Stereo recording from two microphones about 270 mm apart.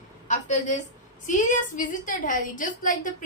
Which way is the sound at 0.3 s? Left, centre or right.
Left.